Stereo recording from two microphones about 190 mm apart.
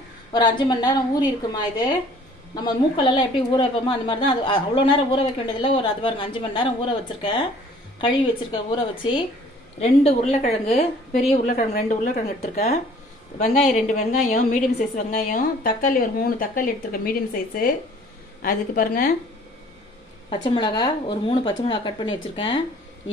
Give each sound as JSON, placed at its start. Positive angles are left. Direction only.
{"t": 0.3, "sound": "a woman's voice", "side_deg": 25}
{"t": 9.8, "sound": "a woman's voice", "side_deg": 35}
{"t": 11.4, "sound": "a woman's voice", "side_deg": 45}
{"t": 20.2, "sound": "a woman's voice", "side_deg": 25}